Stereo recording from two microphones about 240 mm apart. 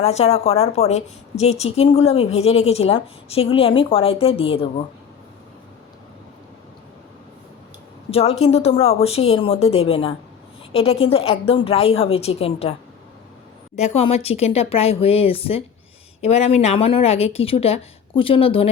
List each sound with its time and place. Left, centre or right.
0.0 s a woman's voice: left
8.1 s a woman's voice: left
13.7 s a woman's voice: left